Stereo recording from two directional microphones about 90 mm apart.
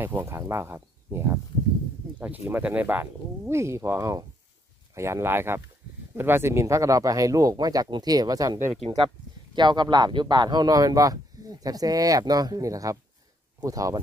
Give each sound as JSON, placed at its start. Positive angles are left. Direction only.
{"t": 0.0, "sound": "speech", "side_deg": -25}
{"t": 2.1, "sound": "speech", "side_deg": -15}
{"t": 9.6, "sound": "speech", "side_deg": -55}